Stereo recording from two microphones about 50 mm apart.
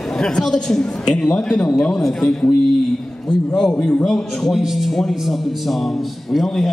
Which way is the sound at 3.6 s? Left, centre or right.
Centre.